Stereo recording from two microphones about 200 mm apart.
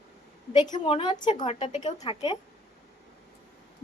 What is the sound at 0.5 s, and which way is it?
A woman's voice, 20° left (ahead or behind).